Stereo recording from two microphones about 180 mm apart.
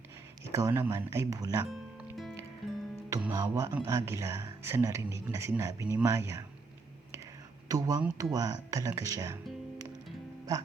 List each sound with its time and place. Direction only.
0.4 s speech: 15° right (ahead or behind)
1.7 s music: 5° right (ahead or behind)
3.1 s speech: 15° right (ahead or behind)
7.7 s speech: 20° right (ahead or behind)